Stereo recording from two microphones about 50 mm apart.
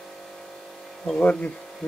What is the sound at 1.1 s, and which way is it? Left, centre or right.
Speech, left.